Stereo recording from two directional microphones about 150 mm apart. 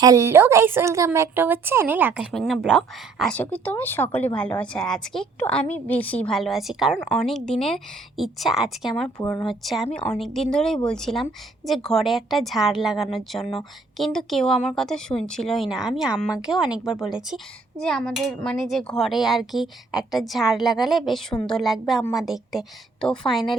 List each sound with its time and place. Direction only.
0.0 s speech: 20° right (ahead or behind)
2.3 s speech: centre (ahead or behind)
3.3 s speech: 10° left (ahead or behind)
9.0 s speech: 10° left (ahead or behind)